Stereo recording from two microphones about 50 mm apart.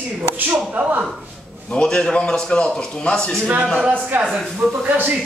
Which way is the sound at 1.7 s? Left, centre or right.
Centre.